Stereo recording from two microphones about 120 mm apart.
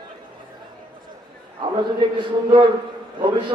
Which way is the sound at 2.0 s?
45° right (ahead or behind).